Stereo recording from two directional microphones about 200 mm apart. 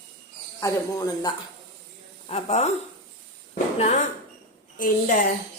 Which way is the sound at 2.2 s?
30° left (ahead or behind).